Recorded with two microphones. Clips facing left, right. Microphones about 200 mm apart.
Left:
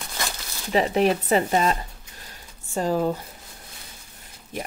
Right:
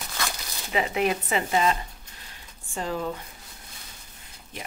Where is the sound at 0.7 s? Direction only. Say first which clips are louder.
Left 5 dB; 35° left (ahead or behind).